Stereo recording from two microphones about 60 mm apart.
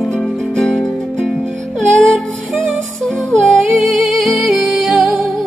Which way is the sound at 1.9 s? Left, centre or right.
Centre.